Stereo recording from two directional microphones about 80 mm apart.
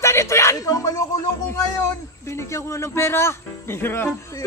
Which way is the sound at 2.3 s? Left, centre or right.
Left.